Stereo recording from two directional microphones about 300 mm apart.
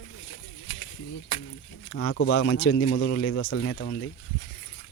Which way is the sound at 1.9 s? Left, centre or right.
Left.